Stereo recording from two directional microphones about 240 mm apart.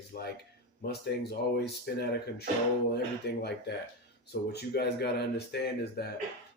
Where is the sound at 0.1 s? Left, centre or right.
Left.